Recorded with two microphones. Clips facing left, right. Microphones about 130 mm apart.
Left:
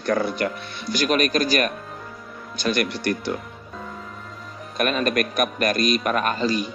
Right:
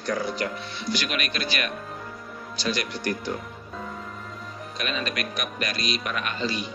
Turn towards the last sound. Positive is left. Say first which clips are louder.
# left 7 dB
turn(degrees=40)  # may be behind; listen again after turning